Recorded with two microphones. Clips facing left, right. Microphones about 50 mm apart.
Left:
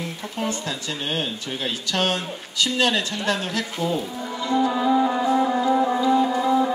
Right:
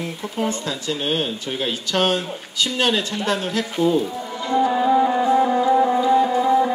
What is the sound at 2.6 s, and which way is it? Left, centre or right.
A man's voice, right.